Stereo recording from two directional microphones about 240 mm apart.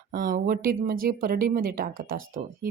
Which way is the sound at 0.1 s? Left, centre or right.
Right.